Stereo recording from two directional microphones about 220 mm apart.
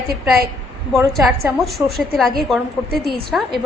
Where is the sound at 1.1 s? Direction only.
Centre (ahead or behind).